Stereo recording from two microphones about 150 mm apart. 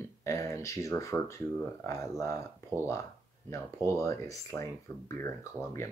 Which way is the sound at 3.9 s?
20° left (ahead or behind).